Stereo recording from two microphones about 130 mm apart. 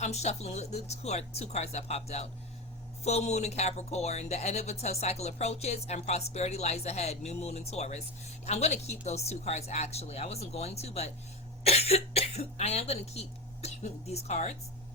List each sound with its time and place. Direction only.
0.0 s speech: 55° left (ahead or behind)